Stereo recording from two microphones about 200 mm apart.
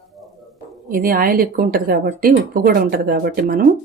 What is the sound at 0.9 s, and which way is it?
A woman's voice, 45° right (ahead or behind).